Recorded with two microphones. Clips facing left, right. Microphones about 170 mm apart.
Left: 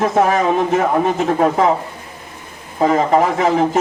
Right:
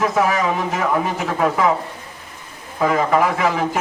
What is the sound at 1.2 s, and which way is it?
Speech, 30° left (ahead or behind).